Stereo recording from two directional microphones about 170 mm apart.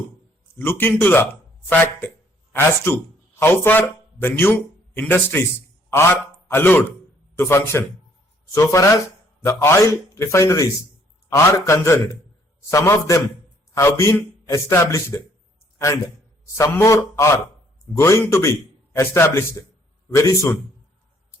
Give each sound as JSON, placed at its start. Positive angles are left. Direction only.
{"t": 0.6, "sound": "a man's voice", "side_deg": 10}
{"t": 16.6, "sound": "a man's voice", "side_deg": 15}